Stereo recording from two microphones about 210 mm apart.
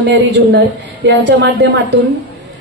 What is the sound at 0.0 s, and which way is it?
A woman's voice, 55° right (ahead or behind).